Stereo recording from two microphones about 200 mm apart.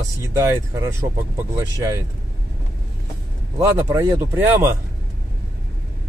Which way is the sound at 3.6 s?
15° right (ahead or behind).